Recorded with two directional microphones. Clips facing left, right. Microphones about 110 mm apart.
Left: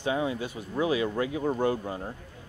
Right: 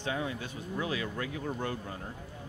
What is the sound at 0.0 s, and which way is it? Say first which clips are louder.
Speech: left 6 dB; 15° left (ahead or behind).